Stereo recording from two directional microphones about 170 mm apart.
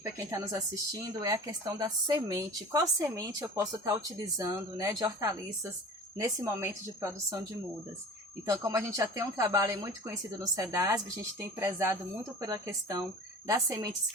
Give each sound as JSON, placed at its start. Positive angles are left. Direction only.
{"t": 0.0, "sound": "speech", "side_deg": -20}
{"t": 8.4, "sound": "speech", "side_deg": -20}